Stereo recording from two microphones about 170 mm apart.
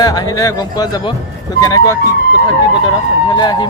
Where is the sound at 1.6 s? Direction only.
20° left (ahead or behind).